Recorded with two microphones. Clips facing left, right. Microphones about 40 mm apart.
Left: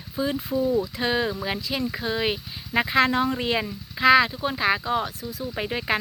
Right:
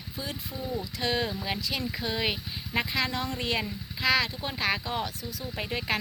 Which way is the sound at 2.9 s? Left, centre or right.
Left.